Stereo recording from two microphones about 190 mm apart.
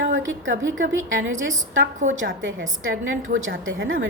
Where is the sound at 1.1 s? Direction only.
85° right.